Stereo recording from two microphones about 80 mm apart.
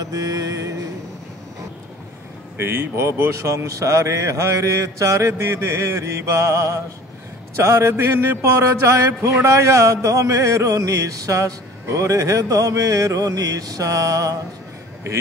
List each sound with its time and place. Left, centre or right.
0.0 s mantra: right
2.5 s speech: right